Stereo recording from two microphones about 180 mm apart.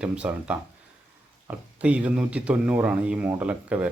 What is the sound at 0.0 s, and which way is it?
A man's voice, 5° right (ahead or behind).